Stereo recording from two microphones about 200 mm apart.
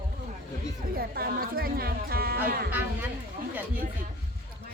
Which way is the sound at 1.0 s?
50° right (ahead or behind).